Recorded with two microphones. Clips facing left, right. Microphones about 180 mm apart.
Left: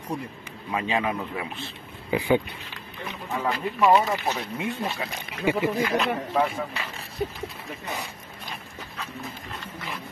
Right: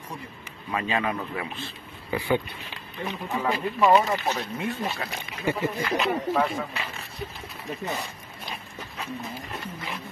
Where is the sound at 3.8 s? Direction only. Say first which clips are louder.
Even; 10° left (ahead or behind).